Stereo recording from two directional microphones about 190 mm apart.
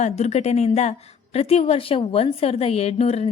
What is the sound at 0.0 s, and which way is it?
A woman's voice, 35° left (ahead or behind).